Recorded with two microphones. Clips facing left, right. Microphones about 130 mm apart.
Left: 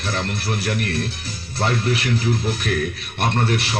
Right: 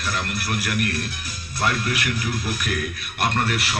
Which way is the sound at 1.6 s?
30° left (ahead or behind).